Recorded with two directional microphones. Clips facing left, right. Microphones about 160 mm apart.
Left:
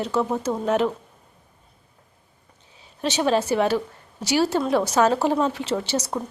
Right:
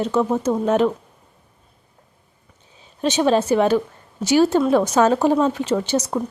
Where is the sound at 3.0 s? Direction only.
20° right (ahead or behind).